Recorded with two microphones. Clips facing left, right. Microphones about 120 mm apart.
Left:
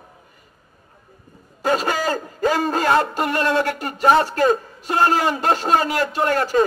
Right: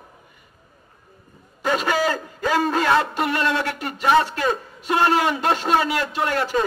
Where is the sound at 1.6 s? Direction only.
40° left (ahead or behind).